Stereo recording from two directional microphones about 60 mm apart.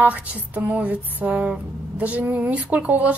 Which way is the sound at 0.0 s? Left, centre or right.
Right.